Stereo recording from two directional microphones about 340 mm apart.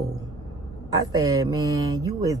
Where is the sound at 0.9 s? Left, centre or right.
Centre.